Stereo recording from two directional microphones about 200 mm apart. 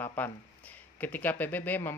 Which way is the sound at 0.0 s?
10° left (ahead or behind).